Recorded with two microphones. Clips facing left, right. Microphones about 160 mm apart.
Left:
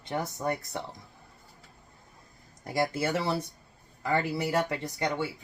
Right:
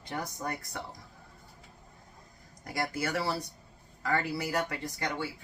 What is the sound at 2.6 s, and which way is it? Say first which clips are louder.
Speech: left 5 dB; 25° left (ahead or behind).